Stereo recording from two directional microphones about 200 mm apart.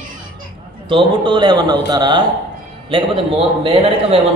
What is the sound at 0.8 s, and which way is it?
A man's voice, 25° right (ahead or behind).